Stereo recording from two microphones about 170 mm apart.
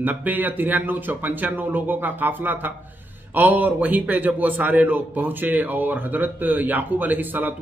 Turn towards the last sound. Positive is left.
turn(degrees=-10)  # may be behind; listen again after turning